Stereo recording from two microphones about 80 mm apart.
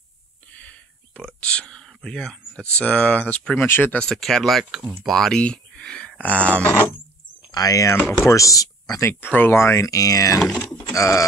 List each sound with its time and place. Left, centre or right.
0.5 s a sound: centre
1.2 s speech: centre
3.5 s speech: left
4.0 s speech: centre
7.5 s speech: left
9.2 s speech: left